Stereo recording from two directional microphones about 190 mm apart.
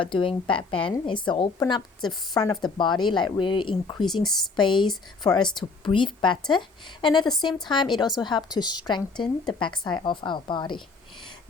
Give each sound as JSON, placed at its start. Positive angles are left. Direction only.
{"t": 0.0, "sound": "a woman's voice", "side_deg": 25}